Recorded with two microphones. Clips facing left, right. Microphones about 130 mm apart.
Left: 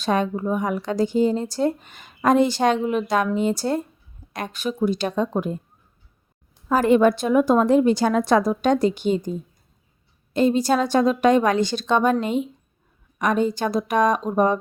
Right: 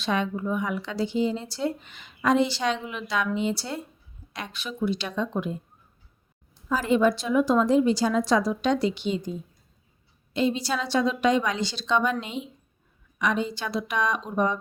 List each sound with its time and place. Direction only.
0.0 s speech: 45° left (ahead or behind)
6.7 s speech: 55° left (ahead or behind)